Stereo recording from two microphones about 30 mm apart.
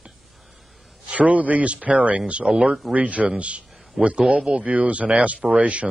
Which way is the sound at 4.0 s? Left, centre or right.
Right.